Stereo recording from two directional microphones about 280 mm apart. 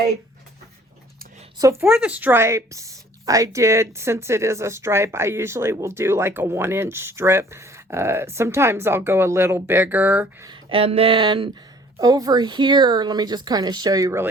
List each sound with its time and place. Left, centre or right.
1.5 s speech: centre
10.5 s speech: centre